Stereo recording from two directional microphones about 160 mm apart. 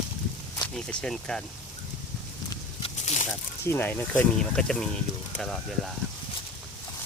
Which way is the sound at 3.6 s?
15° left (ahead or behind).